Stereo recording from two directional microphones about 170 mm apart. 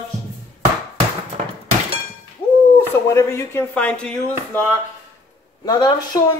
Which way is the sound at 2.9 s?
15° left (ahead or behind).